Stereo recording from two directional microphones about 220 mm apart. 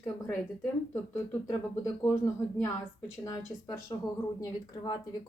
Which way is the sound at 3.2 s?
15° left (ahead or behind).